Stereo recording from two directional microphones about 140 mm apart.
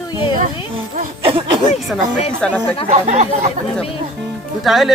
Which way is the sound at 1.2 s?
40° right (ahead or behind).